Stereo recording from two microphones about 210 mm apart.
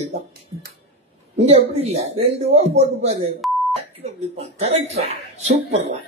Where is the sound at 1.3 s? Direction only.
30° right (ahead or behind).